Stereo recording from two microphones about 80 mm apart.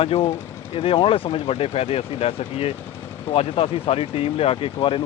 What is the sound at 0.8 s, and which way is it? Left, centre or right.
Speech, left.